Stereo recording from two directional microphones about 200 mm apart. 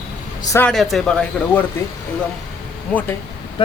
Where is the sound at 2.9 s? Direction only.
10° left (ahead or behind).